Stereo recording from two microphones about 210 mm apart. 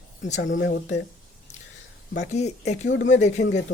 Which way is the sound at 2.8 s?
60° left (ahead or behind).